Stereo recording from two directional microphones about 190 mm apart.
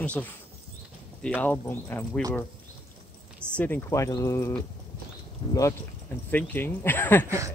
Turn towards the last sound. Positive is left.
turn(degrees=10)  # may be behind; listen again after turning